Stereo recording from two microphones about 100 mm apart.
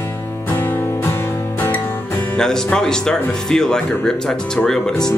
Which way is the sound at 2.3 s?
5° left (ahead or behind).